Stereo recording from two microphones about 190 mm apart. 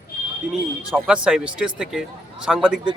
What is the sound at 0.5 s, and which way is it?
Speech, 5° right (ahead or behind).